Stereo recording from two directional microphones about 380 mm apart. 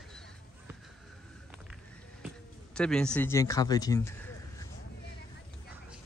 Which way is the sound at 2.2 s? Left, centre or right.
Centre.